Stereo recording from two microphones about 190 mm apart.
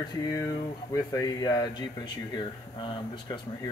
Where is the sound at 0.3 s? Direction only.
20° left (ahead or behind).